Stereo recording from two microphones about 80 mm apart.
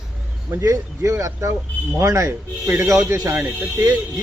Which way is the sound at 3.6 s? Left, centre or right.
Right.